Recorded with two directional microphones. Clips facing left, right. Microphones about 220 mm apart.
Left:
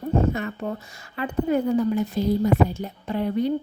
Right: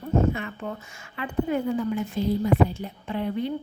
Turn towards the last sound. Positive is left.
turn(degrees=40)  # may be behind; listen again after turning